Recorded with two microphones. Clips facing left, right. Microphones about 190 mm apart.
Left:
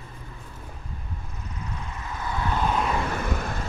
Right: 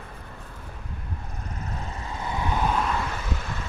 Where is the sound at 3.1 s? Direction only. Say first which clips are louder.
Left 4 dB; 55° left (ahead or behind).